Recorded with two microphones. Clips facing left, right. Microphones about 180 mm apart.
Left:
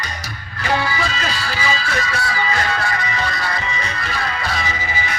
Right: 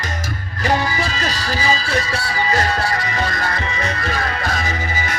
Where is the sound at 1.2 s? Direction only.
40° right (ahead or behind).